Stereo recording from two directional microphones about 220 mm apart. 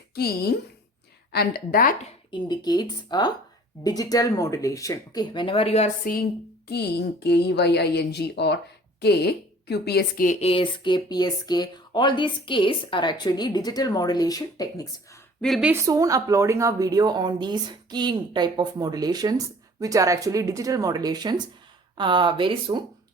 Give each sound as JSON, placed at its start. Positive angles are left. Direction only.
{"t": 0.1, "sound": "a woman's voice", "side_deg": 45}
{"t": 2.3, "sound": "speech", "side_deg": 20}
{"t": 6.7, "sound": "a woman's voice", "side_deg": 50}
{"t": 10.4, "sound": "speech", "side_deg": 25}
{"t": 15.4, "sound": "a woman's voice", "side_deg": 0}
{"t": 15.7, "sound": "a woman's voice", "side_deg": -15}